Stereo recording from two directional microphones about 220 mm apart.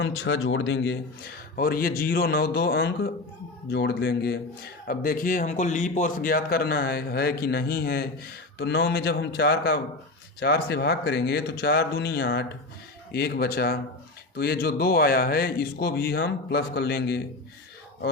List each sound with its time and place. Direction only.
0.0 s speech: 60° left (ahead or behind)